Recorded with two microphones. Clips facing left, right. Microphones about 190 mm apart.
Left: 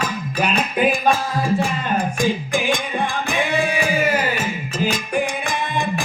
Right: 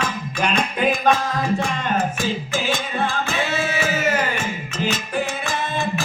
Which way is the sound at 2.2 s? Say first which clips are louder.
Left 3 dB; 15° left (ahead or behind).